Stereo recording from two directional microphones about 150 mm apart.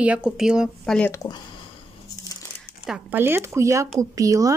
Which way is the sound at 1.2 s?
20° left (ahead or behind).